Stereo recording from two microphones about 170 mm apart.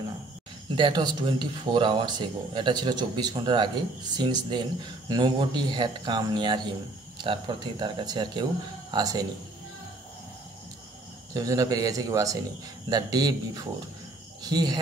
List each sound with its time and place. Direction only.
0.7 s speech: 30° right (ahead or behind)
11.3 s speech: 20° right (ahead or behind)
14.4 s speech: 25° right (ahead or behind)